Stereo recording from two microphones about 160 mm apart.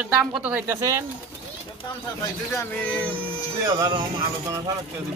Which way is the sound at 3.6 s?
25° right (ahead or behind).